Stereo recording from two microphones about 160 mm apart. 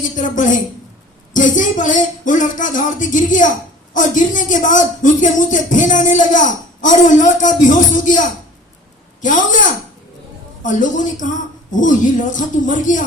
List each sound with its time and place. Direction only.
0.0 s speech: 55° left (ahead or behind)